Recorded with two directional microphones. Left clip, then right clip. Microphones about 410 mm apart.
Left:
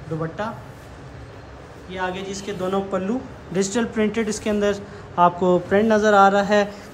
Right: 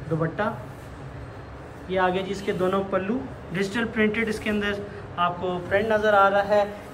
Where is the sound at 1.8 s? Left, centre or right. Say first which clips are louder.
Right 4 dB; centre.